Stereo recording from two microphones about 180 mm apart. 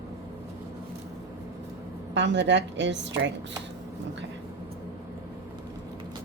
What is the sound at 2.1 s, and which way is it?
A woman's voice, 75° right (ahead or behind).